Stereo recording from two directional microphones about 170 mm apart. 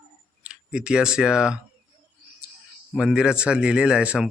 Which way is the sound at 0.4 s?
5° right (ahead or behind).